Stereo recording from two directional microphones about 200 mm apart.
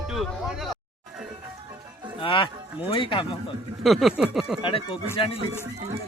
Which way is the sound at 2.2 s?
25° left (ahead or behind).